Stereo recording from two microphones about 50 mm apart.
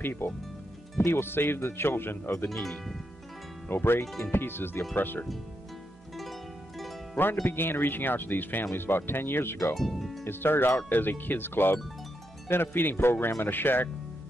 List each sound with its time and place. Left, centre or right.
0.0 s speech: left
3.6 s speech: left
4.0 s speech: centre
4.3 s speech: left
7.4 s speech: left
9.8 s speech: centre
10.2 s speech: left